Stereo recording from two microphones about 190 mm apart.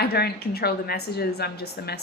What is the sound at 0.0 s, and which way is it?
Speech, 55° left (ahead or behind).